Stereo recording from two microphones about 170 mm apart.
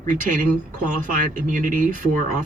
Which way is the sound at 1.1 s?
50° right (ahead or behind).